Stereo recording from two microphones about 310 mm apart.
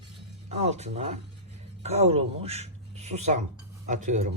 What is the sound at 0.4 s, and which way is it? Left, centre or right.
A man's voice, right.